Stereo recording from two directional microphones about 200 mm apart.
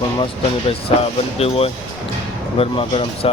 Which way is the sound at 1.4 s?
30° left (ahead or behind).